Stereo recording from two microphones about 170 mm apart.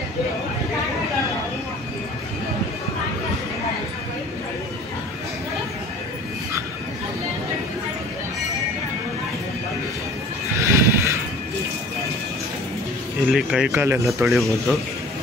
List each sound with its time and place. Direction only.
10.6 s a sound: 15° right (ahead or behind)
13.3 s speech: 5° right (ahead or behind)
13.7 s speech: 15° right (ahead or behind)
14.2 s speech: centre (ahead or behind)